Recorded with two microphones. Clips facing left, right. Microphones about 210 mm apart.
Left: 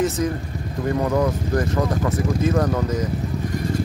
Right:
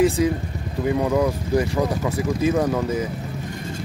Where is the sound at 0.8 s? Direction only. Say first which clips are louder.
Right 1 dB; 10° right (ahead or behind).